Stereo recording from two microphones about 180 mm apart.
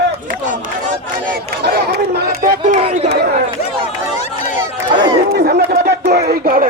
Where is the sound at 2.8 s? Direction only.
35° right (ahead or behind).